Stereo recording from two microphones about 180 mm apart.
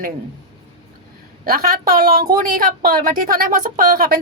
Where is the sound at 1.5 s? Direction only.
50° right (ahead or behind).